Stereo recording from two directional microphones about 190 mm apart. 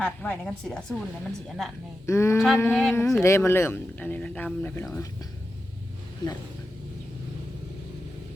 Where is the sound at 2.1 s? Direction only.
15° left (ahead or behind).